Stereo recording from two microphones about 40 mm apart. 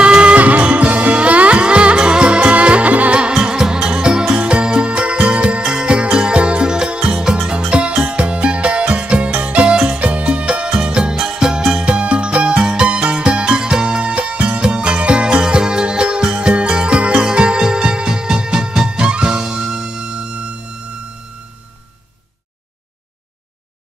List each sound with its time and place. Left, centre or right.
0.0 s music: right
0.4 s music: right
3.2 s music: right
11.8 s music: right
14.7 s music: right